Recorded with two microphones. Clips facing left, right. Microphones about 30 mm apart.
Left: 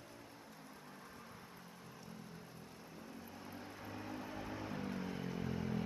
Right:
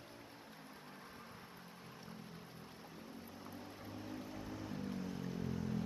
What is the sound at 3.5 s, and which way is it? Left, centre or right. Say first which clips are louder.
Vehicle: left 2 dB; centre.